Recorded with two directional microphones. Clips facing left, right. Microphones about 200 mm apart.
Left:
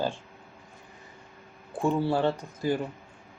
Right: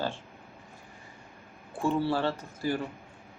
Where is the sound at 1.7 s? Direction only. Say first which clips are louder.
Left 2 dB; 15° left (ahead or behind).